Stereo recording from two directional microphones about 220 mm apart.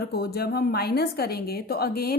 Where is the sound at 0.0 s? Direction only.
45° left (ahead or behind).